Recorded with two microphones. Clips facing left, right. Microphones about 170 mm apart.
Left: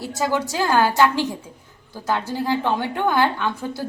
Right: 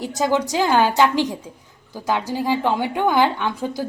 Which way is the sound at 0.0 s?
15° right (ahead or behind).